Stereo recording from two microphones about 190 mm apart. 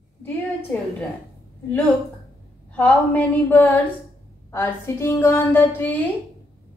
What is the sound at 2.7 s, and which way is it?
A woman's voice, 10° left (ahead or behind).